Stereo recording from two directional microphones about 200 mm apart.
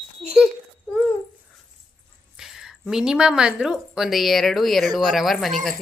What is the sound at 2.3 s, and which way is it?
A woman's voice, 5° right (ahead or behind).